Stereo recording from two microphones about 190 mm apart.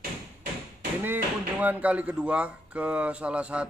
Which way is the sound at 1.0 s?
10° right (ahead or behind).